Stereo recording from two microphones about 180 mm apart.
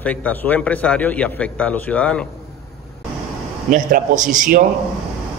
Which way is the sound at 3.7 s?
45° right (ahead or behind).